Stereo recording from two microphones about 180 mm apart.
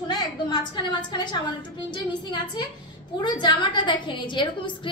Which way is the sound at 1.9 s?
25° left (ahead or behind).